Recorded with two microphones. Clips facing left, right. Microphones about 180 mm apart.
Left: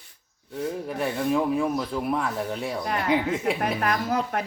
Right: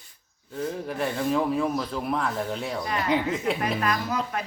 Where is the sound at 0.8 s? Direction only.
5° left (ahead or behind).